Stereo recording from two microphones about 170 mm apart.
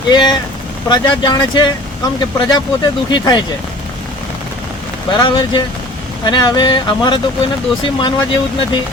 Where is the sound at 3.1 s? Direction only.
25° left (ahead or behind).